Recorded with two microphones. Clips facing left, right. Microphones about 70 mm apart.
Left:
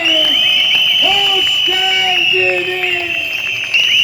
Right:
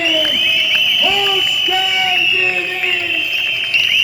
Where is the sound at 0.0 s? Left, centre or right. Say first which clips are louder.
Left 1 dB; right.